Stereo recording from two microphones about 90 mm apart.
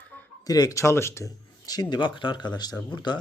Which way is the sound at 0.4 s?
45° left (ahead or behind).